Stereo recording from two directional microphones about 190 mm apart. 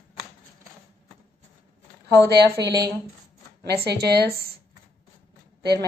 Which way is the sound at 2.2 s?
60° right (ahead or behind).